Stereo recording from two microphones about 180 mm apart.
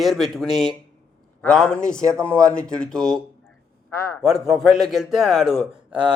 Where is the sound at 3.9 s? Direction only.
15° left (ahead or behind).